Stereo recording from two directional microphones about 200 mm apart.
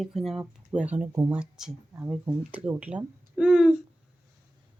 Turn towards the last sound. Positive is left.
turn(degrees=-5)  # may be behind; listen again after turning